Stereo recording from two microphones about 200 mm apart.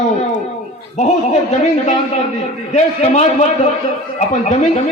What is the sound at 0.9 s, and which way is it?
Speech, 35° left (ahead or behind).